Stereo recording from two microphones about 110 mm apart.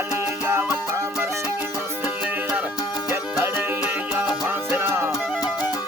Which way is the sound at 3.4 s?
20° right (ahead or behind).